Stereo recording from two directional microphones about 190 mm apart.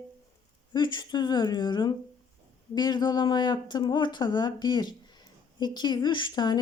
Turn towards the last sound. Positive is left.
turn(degrees=20)  # may be behind; listen again after turning